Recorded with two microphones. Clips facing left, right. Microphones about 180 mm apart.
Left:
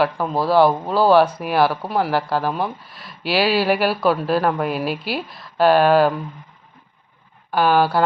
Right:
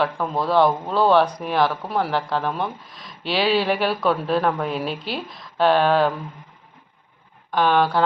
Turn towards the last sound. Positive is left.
turn(degrees=5)  # may be behind; listen again after turning